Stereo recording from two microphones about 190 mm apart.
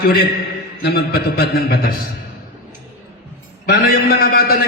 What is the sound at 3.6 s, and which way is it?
Speech, 50° left (ahead or behind).